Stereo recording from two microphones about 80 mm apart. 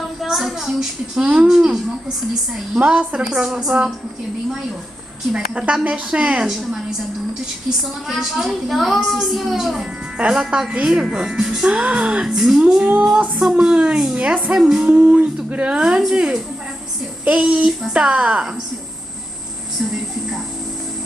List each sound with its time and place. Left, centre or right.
0.2 s a woman's voice: centre
2.8 s a woman's voice: centre
5.3 s a woman's voice: centre
8.1 s a child's voice: centre